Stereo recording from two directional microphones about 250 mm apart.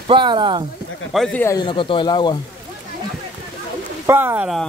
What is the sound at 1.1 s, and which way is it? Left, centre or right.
Speech, centre.